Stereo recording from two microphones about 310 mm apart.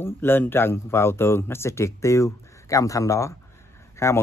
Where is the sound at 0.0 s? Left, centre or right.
Centre.